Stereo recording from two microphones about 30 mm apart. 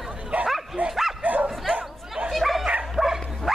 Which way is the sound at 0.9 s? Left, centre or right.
Centre.